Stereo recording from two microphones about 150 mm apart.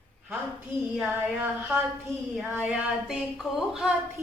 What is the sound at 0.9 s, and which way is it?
Speech, 10° right (ahead or behind).